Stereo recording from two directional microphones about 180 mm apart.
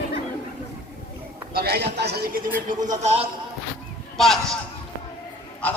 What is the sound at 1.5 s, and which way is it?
A man's voice, 60° right (ahead or behind).